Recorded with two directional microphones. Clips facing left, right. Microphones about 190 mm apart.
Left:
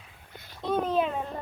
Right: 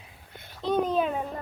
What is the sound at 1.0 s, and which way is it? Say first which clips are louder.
Speech: right 2 dB; 5° right (ahead or behind).